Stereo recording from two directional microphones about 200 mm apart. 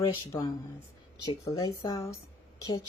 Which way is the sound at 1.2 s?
20° left (ahead or behind).